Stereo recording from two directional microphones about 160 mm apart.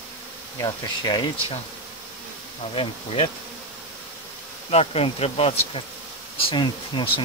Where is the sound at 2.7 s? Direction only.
35° left (ahead or behind).